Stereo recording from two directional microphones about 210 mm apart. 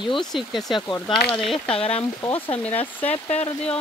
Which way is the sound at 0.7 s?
20° left (ahead or behind).